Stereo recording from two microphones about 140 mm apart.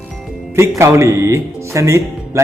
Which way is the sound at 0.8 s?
20° right (ahead or behind).